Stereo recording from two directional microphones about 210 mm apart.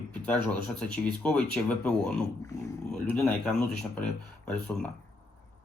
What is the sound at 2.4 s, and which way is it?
Speech, 15° left (ahead or behind).